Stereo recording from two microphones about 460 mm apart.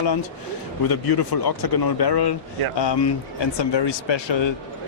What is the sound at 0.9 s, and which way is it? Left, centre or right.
Speech, left.